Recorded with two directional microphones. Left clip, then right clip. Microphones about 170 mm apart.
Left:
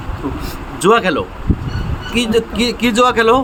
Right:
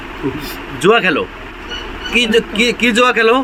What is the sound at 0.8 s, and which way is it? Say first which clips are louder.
A man's voice: right 1 dB; 15° left (ahead or behind).